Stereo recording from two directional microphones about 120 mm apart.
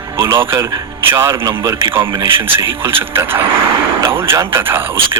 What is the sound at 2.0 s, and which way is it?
Speech, 45° right (ahead or behind).